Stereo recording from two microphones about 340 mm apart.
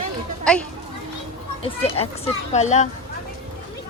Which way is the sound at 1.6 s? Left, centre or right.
Centre.